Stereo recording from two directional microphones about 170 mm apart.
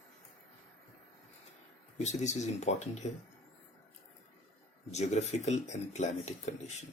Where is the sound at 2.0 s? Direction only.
45° left (ahead or behind).